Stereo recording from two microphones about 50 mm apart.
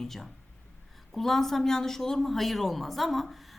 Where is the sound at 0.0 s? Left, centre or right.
Centre.